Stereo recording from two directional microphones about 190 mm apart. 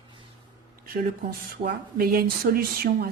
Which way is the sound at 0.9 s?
50° right (ahead or behind).